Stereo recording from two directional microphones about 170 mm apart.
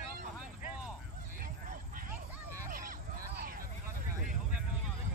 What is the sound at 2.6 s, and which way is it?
Hubbub, 50° right (ahead or behind).